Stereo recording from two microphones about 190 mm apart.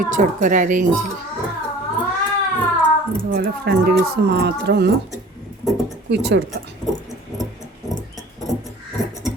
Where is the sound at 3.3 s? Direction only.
60° right (ahead or behind).